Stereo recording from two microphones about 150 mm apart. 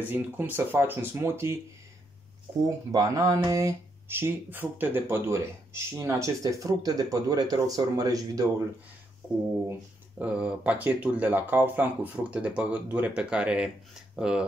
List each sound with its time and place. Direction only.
0.0 s speech: 15° right (ahead or behind)
2.9 s speech: 25° right (ahead or behind)
9.7 s speech: 10° right (ahead or behind)